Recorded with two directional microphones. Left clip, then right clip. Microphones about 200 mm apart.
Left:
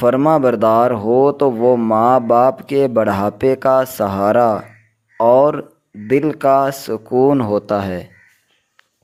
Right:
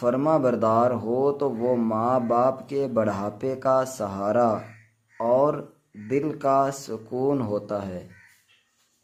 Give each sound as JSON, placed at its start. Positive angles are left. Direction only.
{"t": 0.0, "sound": "speech", "side_deg": 40}